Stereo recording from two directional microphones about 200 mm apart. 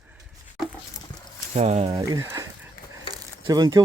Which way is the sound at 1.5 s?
35° right (ahead or behind).